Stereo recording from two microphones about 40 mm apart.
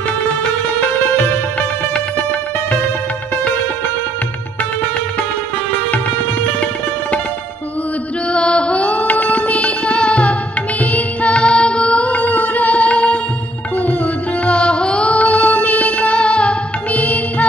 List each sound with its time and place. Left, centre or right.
8.3 s music: left
14.4 s music: left
16.9 s music: left